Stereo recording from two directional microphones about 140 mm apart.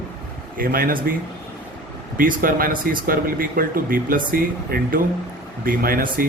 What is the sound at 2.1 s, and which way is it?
Speech, 85° right.